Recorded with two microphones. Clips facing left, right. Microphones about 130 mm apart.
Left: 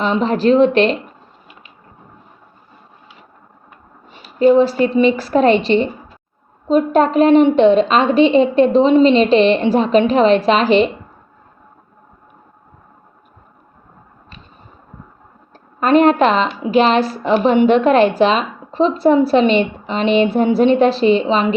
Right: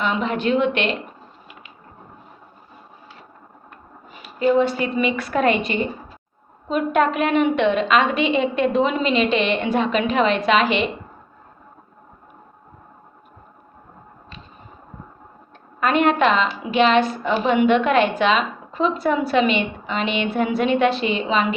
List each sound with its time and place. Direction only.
0.0 s a woman's voice: 35° left (ahead or behind)
4.1 s a woman's voice: 30° left (ahead or behind)
15.8 s a woman's voice: 35° left (ahead or behind)